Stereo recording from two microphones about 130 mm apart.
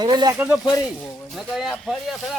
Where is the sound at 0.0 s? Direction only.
30° right (ahead or behind).